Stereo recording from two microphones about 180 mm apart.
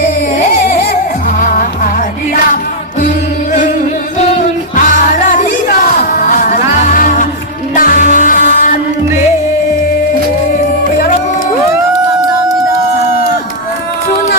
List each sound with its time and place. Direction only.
1.4 s music: 50° left (ahead or behind)
6.0 s music: 50° left (ahead or behind)